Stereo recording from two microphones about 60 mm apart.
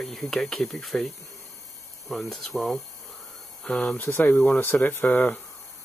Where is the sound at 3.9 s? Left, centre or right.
Left.